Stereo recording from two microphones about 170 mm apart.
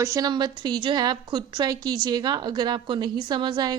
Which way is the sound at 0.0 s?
20° right (ahead or behind).